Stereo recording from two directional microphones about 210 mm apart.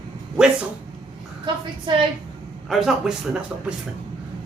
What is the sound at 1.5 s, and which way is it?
Speech, 20° right (ahead or behind).